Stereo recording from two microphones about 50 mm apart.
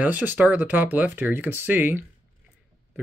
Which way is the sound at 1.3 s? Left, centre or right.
Right.